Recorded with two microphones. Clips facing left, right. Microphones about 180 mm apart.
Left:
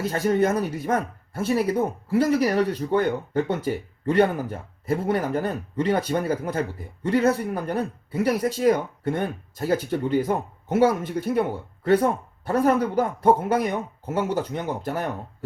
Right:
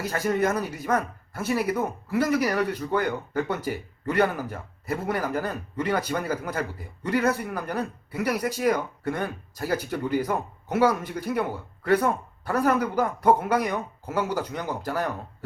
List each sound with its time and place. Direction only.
0.0 s speech: 25° left (ahead or behind)